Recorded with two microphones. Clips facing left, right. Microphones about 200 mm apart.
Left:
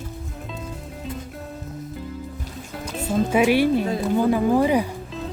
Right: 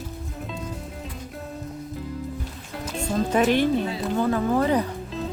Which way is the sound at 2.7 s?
Centre (ahead or behind).